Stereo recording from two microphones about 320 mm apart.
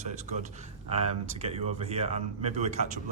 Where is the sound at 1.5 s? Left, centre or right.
Centre.